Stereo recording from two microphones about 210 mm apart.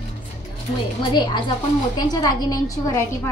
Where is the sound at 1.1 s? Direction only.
20° left (ahead or behind).